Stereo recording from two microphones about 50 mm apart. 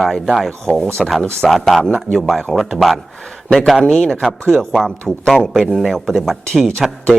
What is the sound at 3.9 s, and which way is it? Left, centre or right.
Speech, centre.